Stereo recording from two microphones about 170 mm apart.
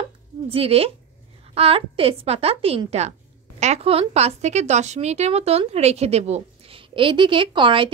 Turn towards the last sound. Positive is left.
turn(degrees=-30)  # may be behind; listen again after turning